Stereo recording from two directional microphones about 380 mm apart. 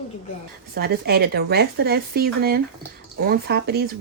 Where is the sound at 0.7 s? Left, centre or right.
Right.